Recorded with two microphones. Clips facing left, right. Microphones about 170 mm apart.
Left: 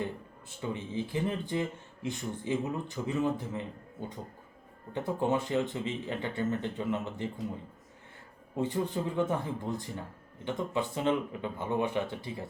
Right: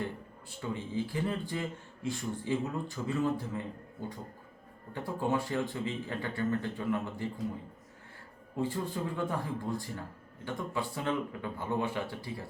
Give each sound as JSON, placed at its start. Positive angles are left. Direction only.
{"t": 0.6, "sound": "speech", "side_deg": 20}
{"t": 4.9, "sound": "speech", "side_deg": 20}
{"t": 8.5, "sound": "speech", "side_deg": 20}